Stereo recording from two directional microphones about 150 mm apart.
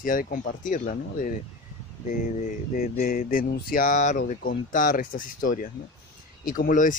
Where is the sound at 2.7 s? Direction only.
75° left (ahead or behind).